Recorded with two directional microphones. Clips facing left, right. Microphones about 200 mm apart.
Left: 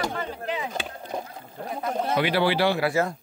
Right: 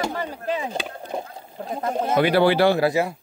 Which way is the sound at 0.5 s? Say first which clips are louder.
Right 3 dB; 30° right (ahead or behind).